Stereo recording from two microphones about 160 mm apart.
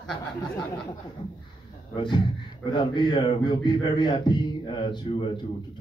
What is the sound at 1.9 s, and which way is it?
A man's voice, 30° left (ahead or behind).